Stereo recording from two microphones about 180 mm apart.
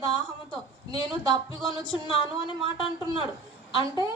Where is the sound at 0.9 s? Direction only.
30° left (ahead or behind).